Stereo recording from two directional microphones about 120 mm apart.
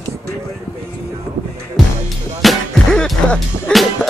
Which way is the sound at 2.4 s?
5° left (ahead or behind).